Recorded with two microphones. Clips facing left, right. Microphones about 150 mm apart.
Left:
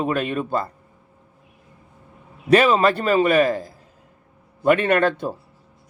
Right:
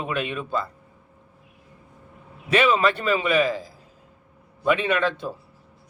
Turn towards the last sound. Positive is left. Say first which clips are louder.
# left 5 dB
turn(degrees=50)  # may be behind; listen again after turning